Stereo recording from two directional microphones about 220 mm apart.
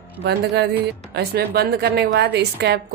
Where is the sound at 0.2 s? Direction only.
50° right (ahead or behind).